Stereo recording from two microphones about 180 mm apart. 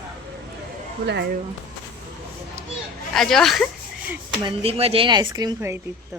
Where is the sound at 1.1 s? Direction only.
70° right (ahead or behind).